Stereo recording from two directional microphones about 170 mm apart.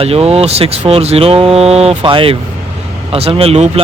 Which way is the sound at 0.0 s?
35° right (ahead or behind).